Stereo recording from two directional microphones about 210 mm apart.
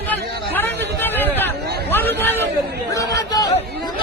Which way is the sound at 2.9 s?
15° left (ahead or behind).